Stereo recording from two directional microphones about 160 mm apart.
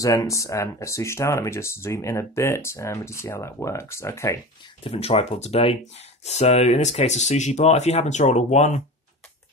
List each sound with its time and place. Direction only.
0.0 s speech: 20° left (ahead or behind)
4.8 s speech: 40° left (ahead or behind)